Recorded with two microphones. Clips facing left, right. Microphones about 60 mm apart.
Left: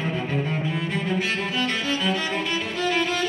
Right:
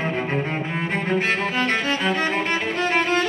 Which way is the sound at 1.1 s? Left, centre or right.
Right.